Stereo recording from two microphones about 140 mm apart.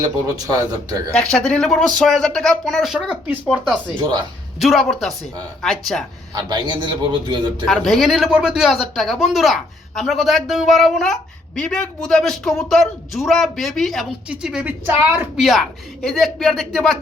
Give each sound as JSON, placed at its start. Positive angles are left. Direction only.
{"t": 0.0, "sound": "speech", "side_deg": -25}
{"t": 1.1, "sound": "a woman's voice", "side_deg": 5}
{"t": 4.6, "sound": "a woman's voice", "side_deg": 0}
{"t": 6.3, "sound": "a man's voice", "side_deg": -35}
{"t": 7.7, "sound": "a woman's voice", "side_deg": 0}
{"t": 15.4, "sound": "a woman's voice", "side_deg": 0}